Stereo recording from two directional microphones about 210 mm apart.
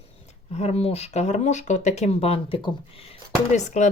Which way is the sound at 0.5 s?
30° left (ahead or behind).